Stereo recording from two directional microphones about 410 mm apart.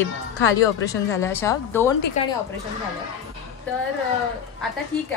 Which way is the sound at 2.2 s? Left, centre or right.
Centre.